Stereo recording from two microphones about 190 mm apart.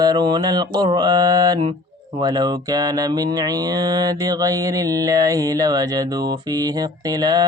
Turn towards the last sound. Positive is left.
turn(degrees=-20)  # may be behind; listen again after turning